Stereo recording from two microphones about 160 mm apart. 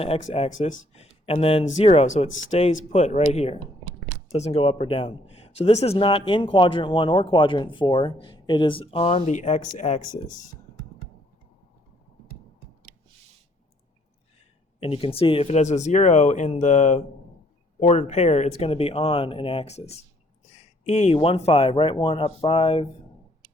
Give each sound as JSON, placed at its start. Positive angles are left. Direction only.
{"t": 0.0, "sound": "speech", "side_deg": 40}
{"t": 14.8, "sound": "speech", "side_deg": 35}